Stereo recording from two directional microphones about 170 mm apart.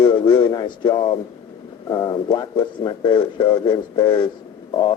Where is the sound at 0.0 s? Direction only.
30° left (ahead or behind).